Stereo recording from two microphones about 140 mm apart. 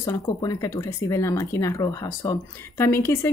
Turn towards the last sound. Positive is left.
turn(degrees=20)  # may be behind; listen again after turning